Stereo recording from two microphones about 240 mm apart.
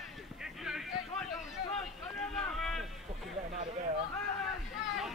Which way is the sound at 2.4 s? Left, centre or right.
Centre.